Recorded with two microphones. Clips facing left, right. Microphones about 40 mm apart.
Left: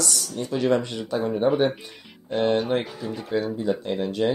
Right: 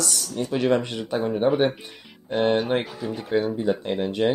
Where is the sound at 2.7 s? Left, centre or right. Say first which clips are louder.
Right 1 dB; right.